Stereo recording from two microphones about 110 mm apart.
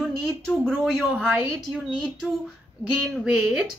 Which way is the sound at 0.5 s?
5° right (ahead or behind).